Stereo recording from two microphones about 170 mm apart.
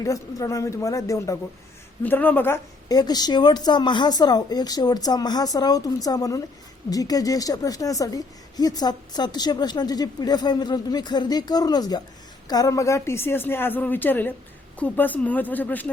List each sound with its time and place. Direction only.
0.0 s a woman's voice: 20° left (ahead or behind)
2.9 s a woman's voice: 25° left (ahead or behind)